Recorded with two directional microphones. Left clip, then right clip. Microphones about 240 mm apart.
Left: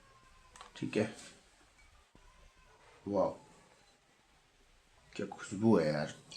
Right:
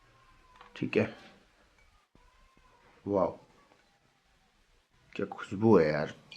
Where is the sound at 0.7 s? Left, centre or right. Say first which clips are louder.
Right 5 dB; right.